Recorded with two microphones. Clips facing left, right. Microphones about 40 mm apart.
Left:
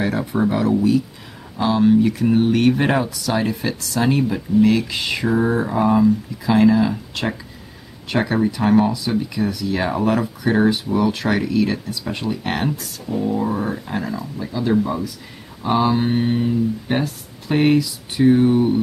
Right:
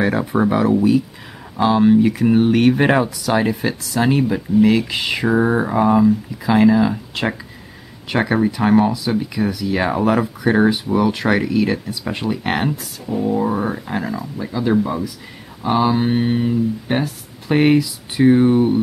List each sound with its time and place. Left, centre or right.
0.0 s speech: centre